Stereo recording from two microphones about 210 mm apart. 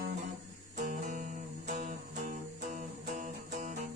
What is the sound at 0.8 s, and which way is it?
Music, 35° right (ahead or behind).